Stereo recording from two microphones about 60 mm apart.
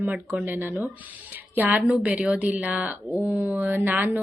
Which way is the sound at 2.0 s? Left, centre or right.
Centre.